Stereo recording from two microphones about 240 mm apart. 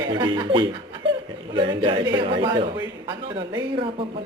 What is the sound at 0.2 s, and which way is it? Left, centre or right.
A man's voice, centre.